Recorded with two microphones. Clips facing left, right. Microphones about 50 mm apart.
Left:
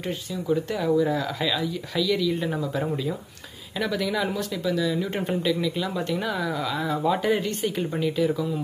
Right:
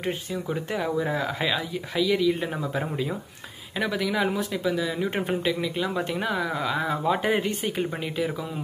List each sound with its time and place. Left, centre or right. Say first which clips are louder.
0.5 s speech: left 6 dB; centre